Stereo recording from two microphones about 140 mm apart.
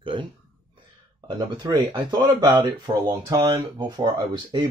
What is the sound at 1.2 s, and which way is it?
Speech, 30° right (ahead or behind).